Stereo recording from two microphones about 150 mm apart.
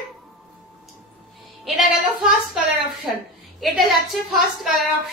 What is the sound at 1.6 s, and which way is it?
A woman's voice, centre (ahead or behind).